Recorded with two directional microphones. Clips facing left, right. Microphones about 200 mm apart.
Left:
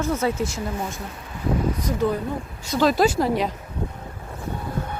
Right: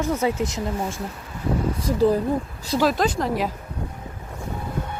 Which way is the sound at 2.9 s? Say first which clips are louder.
Left 3 dB; 5° left (ahead or behind).